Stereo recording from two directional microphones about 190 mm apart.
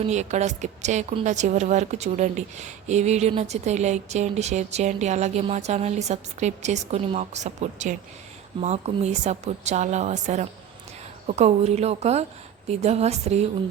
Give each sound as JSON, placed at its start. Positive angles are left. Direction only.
{"t": 0.0, "sound": "a woman's voice", "side_deg": -35}